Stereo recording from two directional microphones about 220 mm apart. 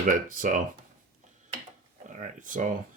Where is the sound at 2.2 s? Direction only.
35° right (ahead or behind).